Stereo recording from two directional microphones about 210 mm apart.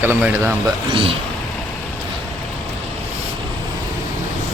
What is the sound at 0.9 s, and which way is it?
Speech, 25° right (ahead or behind).